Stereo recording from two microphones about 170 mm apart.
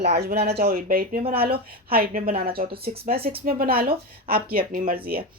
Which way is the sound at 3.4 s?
60° right (ahead or behind).